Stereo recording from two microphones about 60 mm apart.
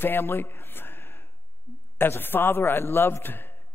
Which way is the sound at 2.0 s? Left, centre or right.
Left.